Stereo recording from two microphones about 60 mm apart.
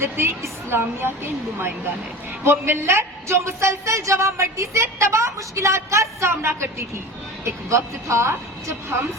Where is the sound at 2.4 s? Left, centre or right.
Right.